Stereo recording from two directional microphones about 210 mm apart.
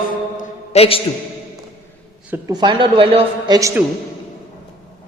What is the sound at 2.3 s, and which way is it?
A woman's voice, 20° right (ahead or behind).